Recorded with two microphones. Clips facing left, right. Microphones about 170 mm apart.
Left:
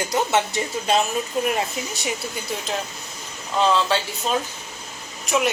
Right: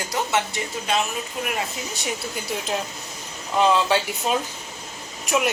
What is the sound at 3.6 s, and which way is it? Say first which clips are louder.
Speech: right 1 dB; 15° right (ahead or behind).